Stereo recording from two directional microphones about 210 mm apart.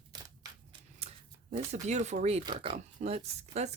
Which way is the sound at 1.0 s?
30° right (ahead or behind).